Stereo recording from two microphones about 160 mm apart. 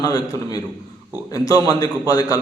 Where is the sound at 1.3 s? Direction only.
20° left (ahead or behind).